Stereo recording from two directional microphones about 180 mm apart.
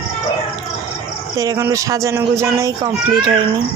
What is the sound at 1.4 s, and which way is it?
Speech, 15° right (ahead or behind).